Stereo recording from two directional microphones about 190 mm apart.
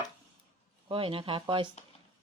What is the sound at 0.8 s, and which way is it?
Speech, 30° right (ahead or behind).